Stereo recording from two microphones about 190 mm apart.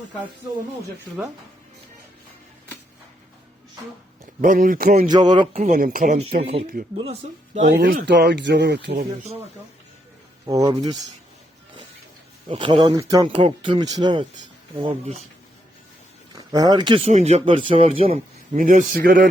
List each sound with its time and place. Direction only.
4.4 s speech: 45° right (ahead or behind)
5.1 s a man's voice: 20° right (ahead or behind)
5.5 s speech: 45° right (ahead or behind)
6.4 s speech: 30° right (ahead or behind); by 8.0 s 50° right (ahead or behind)
8.0 s speech: 65° right (ahead or behind)
10.4 s a man's voice: 20° right (ahead or behind)
12.5 s a man's voice: 25° right (ahead or behind)
16.3 s a man's voice: 20° right (ahead or behind)
18.6 s speech: 45° right (ahead or behind)